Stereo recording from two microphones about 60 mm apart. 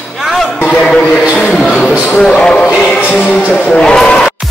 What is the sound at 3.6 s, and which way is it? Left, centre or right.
Speech, centre.